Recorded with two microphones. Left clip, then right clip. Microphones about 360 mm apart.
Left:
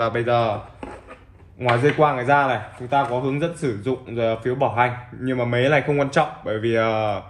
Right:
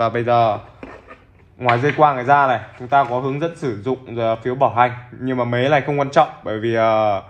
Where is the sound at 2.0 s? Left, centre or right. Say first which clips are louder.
Right 7 dB; centre.